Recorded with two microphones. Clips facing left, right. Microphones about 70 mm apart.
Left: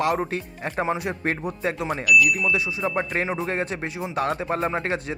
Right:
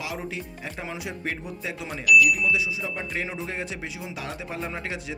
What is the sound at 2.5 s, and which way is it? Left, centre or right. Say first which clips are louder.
Speech: left 4 dB; left.